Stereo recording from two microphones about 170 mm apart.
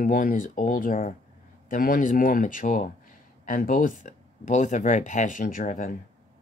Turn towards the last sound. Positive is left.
turn(degrees=55)  # may be behind; listen again after turning